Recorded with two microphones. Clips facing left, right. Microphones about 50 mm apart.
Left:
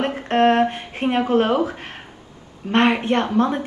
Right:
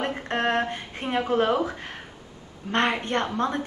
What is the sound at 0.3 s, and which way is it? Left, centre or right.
A woman's voice, left.